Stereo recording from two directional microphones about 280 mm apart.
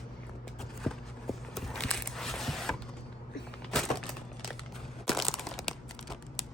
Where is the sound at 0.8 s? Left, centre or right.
Centre.